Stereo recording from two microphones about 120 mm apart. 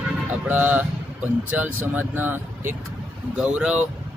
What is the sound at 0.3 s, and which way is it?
Speech, 15° right (ahead or behind).